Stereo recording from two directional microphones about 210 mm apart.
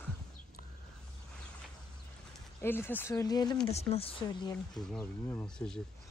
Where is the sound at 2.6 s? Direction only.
10° left (ahead or behind).